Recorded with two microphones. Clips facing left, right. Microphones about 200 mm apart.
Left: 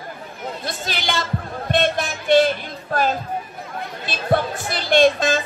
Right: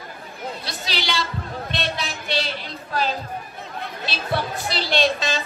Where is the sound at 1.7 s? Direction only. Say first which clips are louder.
Left 10 dB; 50° left (ahead or behind).